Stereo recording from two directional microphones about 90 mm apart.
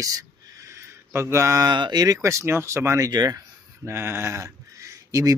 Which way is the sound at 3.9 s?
25° right (ahead or behind).